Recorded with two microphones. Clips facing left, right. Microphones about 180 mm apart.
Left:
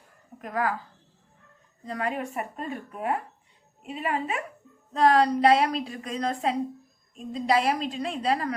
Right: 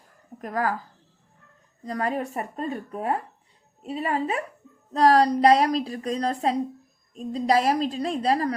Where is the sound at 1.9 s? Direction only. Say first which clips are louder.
Right 3 dB; 40° right (ahead or behind).